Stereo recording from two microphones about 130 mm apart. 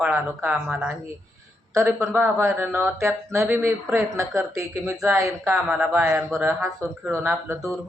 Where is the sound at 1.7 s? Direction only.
25° right (ahead or behind).